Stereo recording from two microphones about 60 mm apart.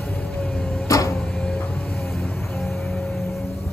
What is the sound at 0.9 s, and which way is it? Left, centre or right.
Printer, left.